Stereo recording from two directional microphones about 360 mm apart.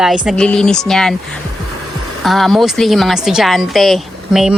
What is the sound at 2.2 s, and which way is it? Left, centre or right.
A woman's voice, centre.